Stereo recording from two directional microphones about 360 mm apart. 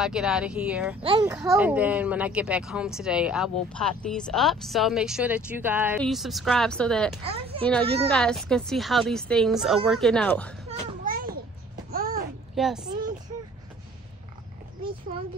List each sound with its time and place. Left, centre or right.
0.0 s speech: centre
10.7 s children playing: right
11.9 s babbling: right
12.5 s a child's voice: centre